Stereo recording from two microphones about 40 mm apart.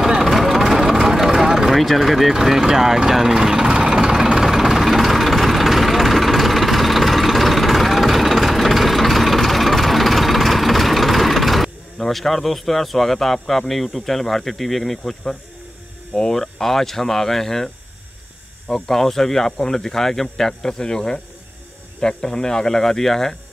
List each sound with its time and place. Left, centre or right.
0.2 s vehicle: centre
2.3 s speech: centre
2.6 s vehicle: centre
16.2 s speech: centre
18.7 s speech: centre